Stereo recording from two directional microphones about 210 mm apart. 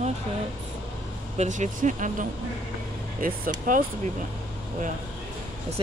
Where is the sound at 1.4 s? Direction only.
35° right (ahead or behind).